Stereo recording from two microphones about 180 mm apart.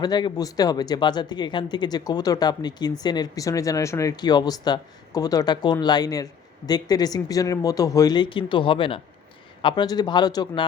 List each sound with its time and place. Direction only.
0.0 s speech: 25° left (ahead or behind)